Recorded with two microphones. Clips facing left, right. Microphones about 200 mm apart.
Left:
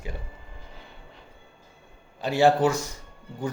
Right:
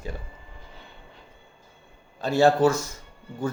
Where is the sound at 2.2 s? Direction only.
15° left (ahead or behind).